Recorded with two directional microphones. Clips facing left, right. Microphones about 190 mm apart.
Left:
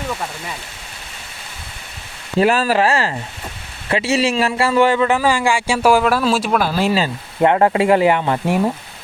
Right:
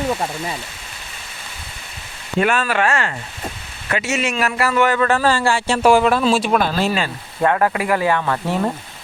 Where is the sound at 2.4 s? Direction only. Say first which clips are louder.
Left 4 dB; 35° left (ahead or behind).